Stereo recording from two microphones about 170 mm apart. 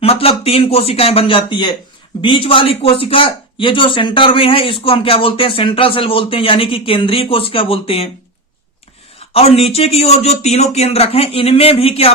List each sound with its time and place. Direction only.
0.0 s a man's voice: 35° left (ahead or behind)
9.3 s a man's voice: 35° left (ahead or behind)